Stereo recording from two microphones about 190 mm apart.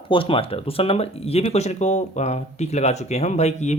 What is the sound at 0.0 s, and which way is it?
Speech, 30° left (ahead or behind).